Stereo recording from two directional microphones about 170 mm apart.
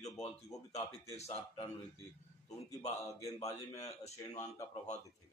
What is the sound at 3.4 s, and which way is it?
Speech, 40° left (ahead or behind).